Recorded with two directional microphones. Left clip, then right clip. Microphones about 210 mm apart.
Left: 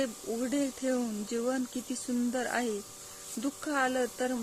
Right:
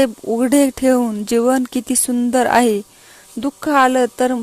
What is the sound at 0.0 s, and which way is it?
Speech, 50° right (ahead or behind).